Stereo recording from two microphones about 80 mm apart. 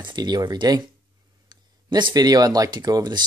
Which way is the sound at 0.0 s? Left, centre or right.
Right.